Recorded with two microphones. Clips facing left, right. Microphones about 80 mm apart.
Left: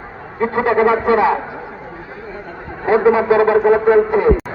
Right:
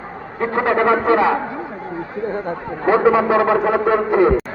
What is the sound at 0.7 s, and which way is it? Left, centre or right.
Speech, centre.